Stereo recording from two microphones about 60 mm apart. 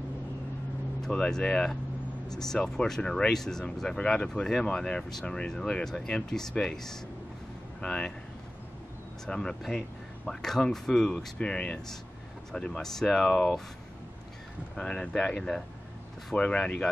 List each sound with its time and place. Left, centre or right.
1.0 s speech: centre
9.2 s speech: centre
11.3 s speech: centre
14.8 s speech: centre